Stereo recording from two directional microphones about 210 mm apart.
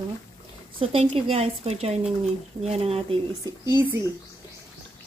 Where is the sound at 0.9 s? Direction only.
25° right (ahead or behind).